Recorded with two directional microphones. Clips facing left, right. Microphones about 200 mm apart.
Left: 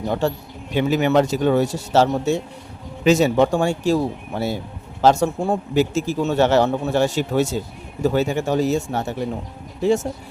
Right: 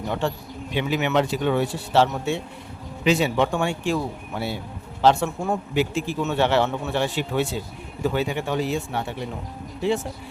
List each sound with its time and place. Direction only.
0.1 s a man's voice: 40° left (ahead or behind)